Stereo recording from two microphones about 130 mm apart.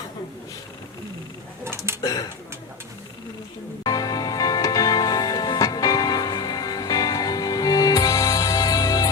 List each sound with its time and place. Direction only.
1.6 s a sound: 20° right (ahead or behind)
2.0 s speech: 25° left (ahead or behind)
3.8 s music: 30° left (ahead or behind)